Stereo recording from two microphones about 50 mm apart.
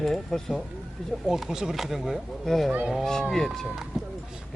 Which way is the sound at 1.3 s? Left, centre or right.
Centre.